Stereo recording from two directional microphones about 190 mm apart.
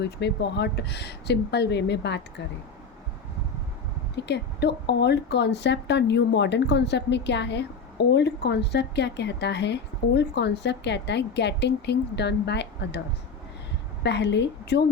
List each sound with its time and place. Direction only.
0.0 s speech: 60° left (ahead or behind)
4.3 s speech: 65° left (ahead or behind)
14.0 s speech: 65° left (ahead or behind)